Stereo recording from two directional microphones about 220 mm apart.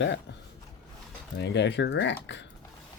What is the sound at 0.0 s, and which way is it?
Speech, 55° left (ahead or behind).